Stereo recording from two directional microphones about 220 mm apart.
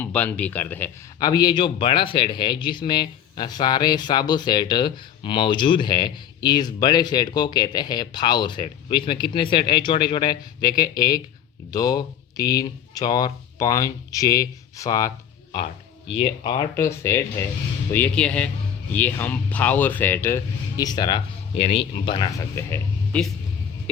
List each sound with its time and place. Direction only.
0.0 s a man's voice: 5° left (ahead or behind)